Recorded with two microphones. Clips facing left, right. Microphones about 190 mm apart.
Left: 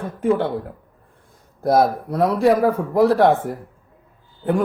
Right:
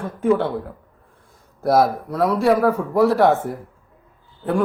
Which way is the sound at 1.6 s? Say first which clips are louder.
Even; 20° left (ahead or behind).